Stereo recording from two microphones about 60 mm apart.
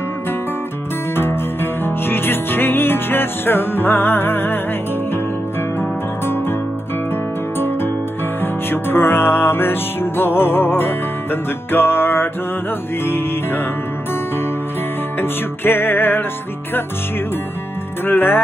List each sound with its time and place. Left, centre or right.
1.1 s music: left
5.8 s music: left
7.5 s music: left
15.1 s music: left
18.0 s music: left